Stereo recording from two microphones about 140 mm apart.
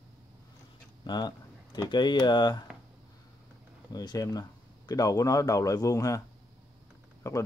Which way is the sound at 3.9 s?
25° left (ahead or behind).